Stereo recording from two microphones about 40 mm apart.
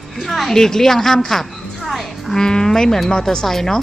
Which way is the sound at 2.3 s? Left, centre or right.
Centre.